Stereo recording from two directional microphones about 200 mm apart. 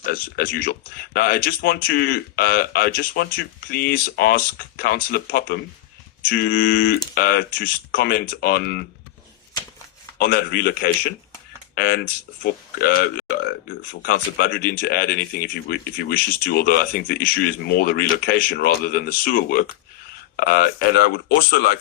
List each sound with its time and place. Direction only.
0.0 s speech: 50° left (ahead or behind)
10.2 s speech: 45° left (ahead or behind)
14.1 s speech: 50° left (ahead or behind)